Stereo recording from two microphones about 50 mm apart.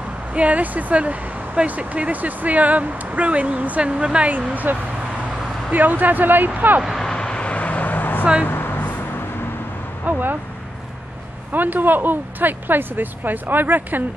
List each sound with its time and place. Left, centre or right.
0.3 s speech: right
5.7 s speech: right
7.0 s vehicle: centre; by 8.3 s left
8.5 s a sound: left
10.0 s speech: right
11.5 s speech: right